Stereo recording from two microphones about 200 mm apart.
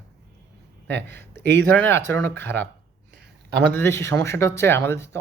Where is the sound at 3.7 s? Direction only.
10° left (ahead or behind).